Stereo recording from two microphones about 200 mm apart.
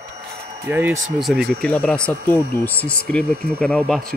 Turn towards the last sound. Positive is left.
turn(degrees=0)  # may be behind; listen again after turning